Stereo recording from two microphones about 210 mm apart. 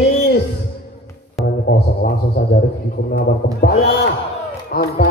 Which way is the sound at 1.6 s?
45° left (ahead or behind).